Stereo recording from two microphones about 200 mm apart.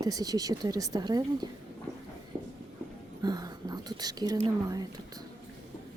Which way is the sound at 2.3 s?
5° right (ahead or behind).